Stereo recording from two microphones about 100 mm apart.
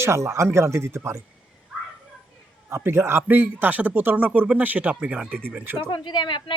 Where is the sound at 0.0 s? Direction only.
30° right (ahead or behind).